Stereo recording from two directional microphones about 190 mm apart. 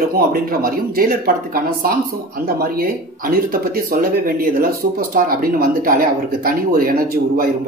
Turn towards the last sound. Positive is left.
turn(degrees=-50)  # may be behind; listen again after turning